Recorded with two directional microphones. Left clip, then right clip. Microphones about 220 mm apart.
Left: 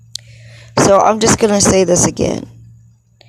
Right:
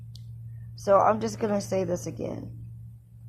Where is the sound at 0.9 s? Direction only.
45° left (ahead or behind).